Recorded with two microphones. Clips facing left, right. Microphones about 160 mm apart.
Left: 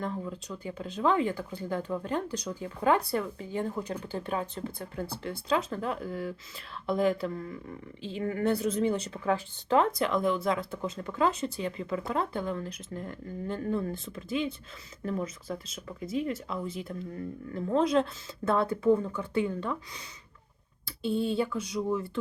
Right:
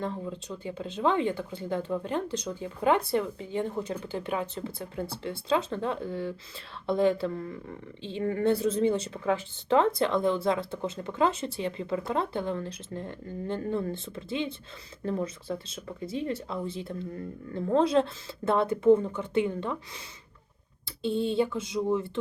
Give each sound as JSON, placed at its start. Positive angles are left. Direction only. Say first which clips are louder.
{"t": 0.0, "sound": "speech", "louder": "right 1 dB", "side_deg": -25}
{"t": 7.3, "sound": "speech", "louder": "right 2 dB", "side_deg": -40}
{"t": 20.8, "sound": "speech", "louder": "right 1 dB", "side_deg": -25}